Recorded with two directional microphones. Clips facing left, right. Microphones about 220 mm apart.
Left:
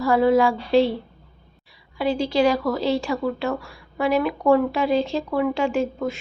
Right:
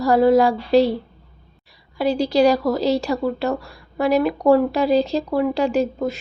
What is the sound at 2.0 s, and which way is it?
A woman's voice, 40° right (ahead or behind).